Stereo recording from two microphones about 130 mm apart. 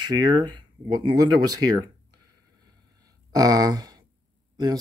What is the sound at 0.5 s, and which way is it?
Speech, 35° right (ahead or behind).